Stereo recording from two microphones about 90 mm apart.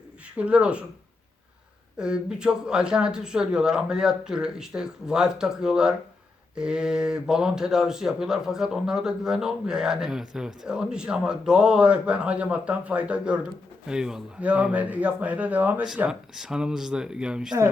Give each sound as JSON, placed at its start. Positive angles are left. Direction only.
{"t": 0.3, "sound": "speech", "side_deg": -15}
{"t": 2.0, "sound": "speech", "side_deg": -10}
{"t": 16.0, "sound": "speech", "side_deg": -5}